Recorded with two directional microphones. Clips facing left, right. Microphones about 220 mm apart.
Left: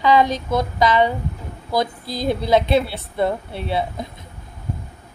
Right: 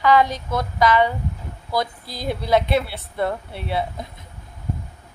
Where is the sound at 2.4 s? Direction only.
20° left (ahead or behind).